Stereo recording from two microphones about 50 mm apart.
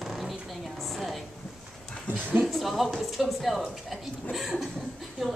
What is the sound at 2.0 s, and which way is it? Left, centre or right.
Speech, right.